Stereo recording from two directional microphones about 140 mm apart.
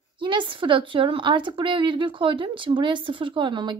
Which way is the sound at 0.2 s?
35° right (ahead or behind).